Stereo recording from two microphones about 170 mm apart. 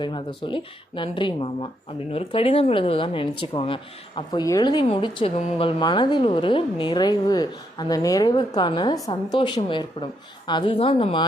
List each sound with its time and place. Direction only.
0.0 s speech: 30° left (ahead or behind)